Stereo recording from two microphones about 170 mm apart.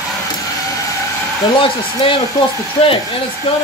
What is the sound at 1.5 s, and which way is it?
Speech, 30° left (ahead or behind).